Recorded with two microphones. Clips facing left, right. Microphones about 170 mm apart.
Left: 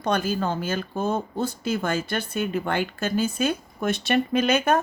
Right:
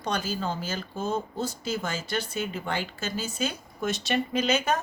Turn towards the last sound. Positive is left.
turn(degrees=55)  # may be behind; listen again after turning